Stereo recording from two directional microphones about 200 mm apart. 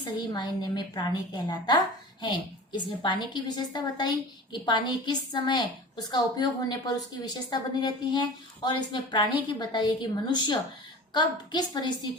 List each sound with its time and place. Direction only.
0.0 s a woman's voice: 20° left (ahead or behind)